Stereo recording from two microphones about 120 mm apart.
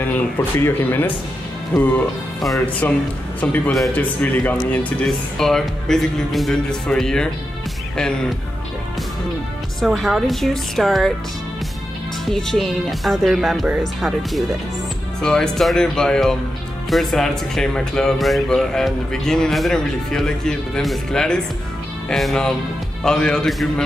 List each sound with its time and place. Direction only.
0.0 s speech: 15° left (ahead or behind)
9.8 s speech: centre (ahead or behind)
12.3 s speech: 5° left (ahead or behind)
15.2 s speech: 5° left (ahead or behind)